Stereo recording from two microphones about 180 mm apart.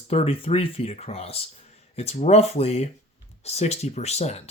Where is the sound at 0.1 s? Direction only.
35° left (ahead or behind).